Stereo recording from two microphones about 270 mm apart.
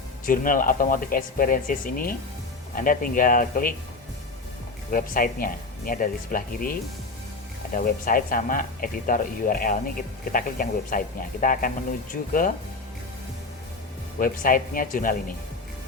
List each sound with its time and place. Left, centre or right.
0.3 s speech: left
4.9 s speech: left
14.2 s speech: left